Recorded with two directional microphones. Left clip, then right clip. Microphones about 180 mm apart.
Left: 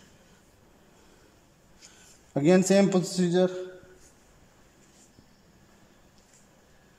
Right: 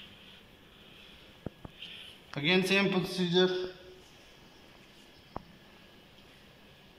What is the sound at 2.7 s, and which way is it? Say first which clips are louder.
Speech: left 5 dB; 75° left (ahead or behind).